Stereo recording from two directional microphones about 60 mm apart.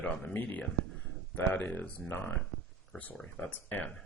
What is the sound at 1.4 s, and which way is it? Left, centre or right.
Speech, left.